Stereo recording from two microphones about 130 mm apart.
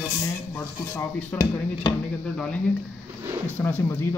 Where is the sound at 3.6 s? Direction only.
15° left (ahead or behind).